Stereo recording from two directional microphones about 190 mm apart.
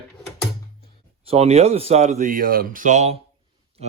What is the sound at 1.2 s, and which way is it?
A man's voice, 35° right (ahead or behind).